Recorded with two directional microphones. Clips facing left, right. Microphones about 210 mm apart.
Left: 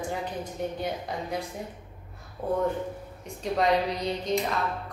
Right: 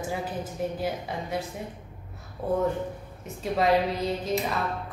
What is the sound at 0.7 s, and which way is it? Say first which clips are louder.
Speech: right 1 dB; centre (ahead or behind).